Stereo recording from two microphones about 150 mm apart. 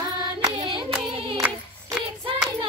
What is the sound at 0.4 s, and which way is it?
Hands, 30° right (ahead or behind).